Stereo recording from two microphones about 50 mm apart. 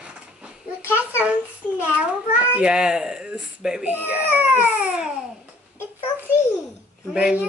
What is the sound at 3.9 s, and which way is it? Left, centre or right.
Speech, right.